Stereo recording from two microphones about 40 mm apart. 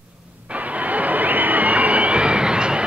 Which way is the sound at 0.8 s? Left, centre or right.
Right.